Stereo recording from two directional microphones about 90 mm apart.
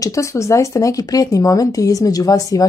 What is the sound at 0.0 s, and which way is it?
Speech, 35° left (ahead or behind).